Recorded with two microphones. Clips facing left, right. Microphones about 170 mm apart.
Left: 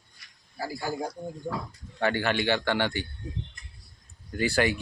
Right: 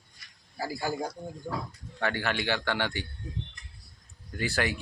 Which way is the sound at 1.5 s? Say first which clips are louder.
Left 2 dB; 15° left (ahead or behind).